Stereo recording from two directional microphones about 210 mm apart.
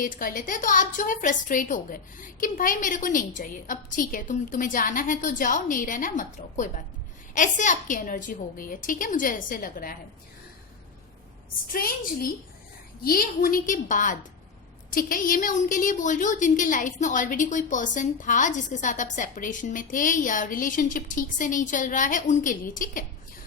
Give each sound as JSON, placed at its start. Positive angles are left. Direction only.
{"t": 0.0, "sound": "a woman's voice", "side_deg": 40}
{"t": 11.7, "sound": "a woman's voice", "side_deg": 45}